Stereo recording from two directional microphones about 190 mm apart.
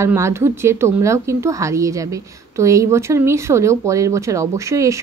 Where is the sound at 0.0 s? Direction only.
15° right (ahead or behind).